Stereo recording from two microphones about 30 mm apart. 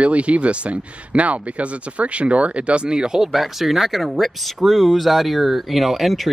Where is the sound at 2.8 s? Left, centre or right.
Right.